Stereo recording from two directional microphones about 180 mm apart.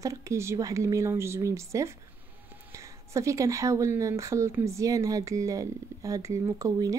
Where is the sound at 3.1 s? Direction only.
15° right (ahead or behind).